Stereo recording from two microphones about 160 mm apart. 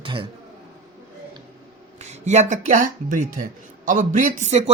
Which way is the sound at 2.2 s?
50° right (ahead or behind).